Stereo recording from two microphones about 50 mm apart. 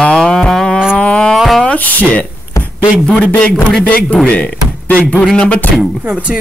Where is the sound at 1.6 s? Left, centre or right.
Left.